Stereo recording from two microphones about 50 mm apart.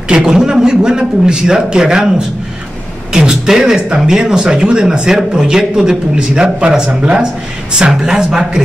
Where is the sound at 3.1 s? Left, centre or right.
Centre.